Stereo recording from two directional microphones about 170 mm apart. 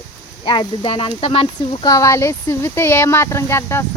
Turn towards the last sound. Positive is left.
turn(degrees=15)  # may be behind; listen again after turning